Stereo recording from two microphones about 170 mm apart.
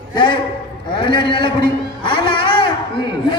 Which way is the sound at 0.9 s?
30° left (ahead or behind).